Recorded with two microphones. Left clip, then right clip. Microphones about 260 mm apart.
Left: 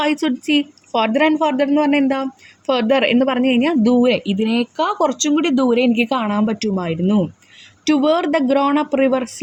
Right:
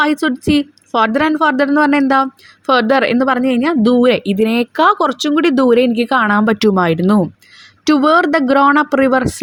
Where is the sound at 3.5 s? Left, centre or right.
Centre.